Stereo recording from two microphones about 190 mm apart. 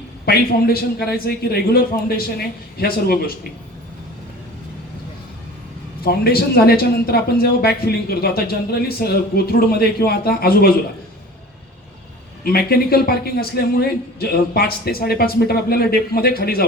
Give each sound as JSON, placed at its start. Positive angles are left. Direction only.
{"t": 0.3, "sound": "speech", "side_deg": 55}
{"t": 6.0, "sound": "speech", "side_deg": 55}
{"t": 12.5, "sound": "a man's voice", "side_deg": 55}